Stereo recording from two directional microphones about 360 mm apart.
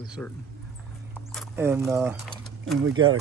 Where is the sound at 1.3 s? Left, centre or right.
Centre.